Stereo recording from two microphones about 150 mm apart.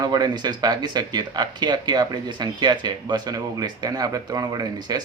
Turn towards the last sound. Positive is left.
turn(degrees=-25)  # may be behind; listen again after turning